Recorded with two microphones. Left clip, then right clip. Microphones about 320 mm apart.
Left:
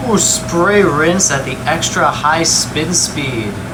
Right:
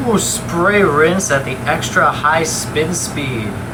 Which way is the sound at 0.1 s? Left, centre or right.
Centre.